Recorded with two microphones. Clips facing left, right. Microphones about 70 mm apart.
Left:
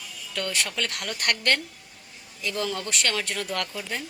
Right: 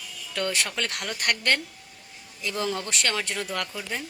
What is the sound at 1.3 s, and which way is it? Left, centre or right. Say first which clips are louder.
Speech: even; centre.